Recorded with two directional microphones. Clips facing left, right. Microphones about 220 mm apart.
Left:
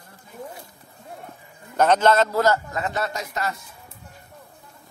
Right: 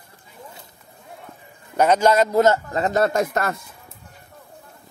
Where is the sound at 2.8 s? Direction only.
45° right (ahead or behind).